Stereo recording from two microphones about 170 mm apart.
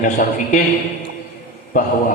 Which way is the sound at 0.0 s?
50° left (ahead or behind).